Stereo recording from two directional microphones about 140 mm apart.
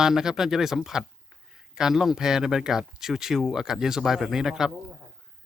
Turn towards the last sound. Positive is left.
turn(degrees=-5)  # may be behind; listen again after turning